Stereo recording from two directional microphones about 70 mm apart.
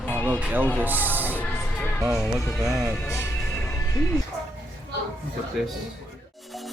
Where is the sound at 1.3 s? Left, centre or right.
Left.